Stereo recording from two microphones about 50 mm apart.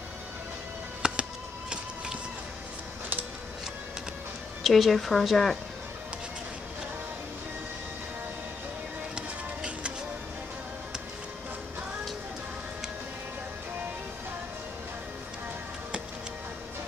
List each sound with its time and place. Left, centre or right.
1.0 s music: centre
4.6 s speech: centre
9.1 s music: centre